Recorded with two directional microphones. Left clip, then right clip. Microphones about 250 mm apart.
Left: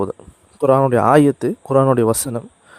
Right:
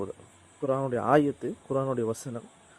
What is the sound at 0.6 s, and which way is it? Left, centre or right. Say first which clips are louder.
Speech: left 15 dB; left.